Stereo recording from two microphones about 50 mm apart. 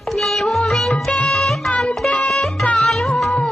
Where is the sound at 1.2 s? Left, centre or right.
Centre.